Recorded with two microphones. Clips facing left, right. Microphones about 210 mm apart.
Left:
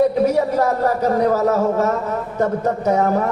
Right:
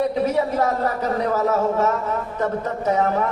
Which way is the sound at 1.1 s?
40° left (ahead or behind).